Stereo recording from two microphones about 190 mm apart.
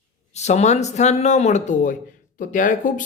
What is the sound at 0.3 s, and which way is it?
Speech, 35° left (ahead or behind).